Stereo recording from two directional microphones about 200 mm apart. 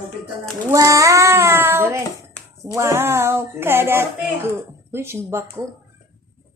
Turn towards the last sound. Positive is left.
turn(degrees=-15)  # may be behind; listen again after turning